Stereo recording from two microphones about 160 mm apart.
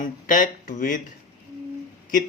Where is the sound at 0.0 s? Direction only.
55° left (ahead or behind).